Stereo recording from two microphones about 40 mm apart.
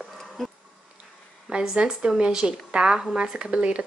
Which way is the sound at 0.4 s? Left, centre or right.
Centre.